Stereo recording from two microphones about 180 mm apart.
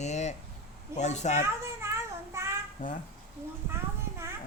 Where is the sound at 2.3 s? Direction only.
15° right (ahead or behind).